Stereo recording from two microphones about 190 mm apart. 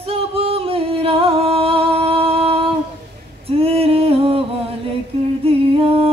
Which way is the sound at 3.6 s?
30° right (ahead or behind).